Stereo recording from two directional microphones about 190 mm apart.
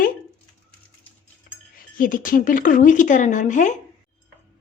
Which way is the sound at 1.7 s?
45° left (ahead or behind).